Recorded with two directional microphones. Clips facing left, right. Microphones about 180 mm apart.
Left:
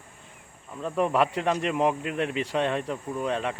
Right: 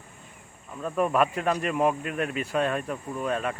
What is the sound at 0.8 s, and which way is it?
Speech, 20° left (ahead or behind).